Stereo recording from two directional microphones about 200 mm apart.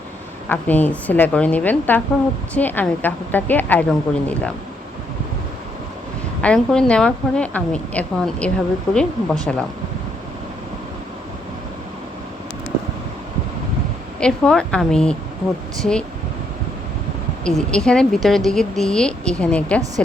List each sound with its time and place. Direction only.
0.4 s a woman's voice: 10° left (ahead or behind)
6.4 s a woman's voice: 5° left (ahead or behind)
14.2 s a woman's voice: 5° left (ahead or behind)
17.4 s a woman's voice: 5° left (ahead or behind)